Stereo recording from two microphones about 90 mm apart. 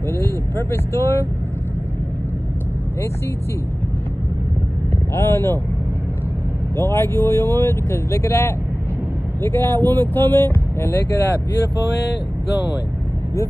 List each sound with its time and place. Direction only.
0.1 s speech: 25° left (ahead or behind)
5.1 s speech: 25° left (ahead or behind)
6.8 s speech: 25° left (ahead or behind)